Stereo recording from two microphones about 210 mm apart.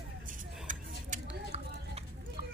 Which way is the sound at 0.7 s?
35° right (ahead or behind).